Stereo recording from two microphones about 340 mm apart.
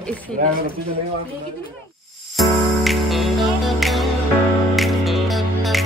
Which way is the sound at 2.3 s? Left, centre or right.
Centre.